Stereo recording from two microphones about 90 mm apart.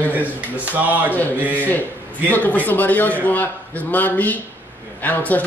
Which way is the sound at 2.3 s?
15° left (ahead or behind).